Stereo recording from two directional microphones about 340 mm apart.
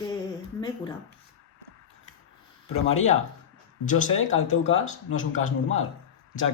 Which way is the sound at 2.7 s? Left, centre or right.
Centre.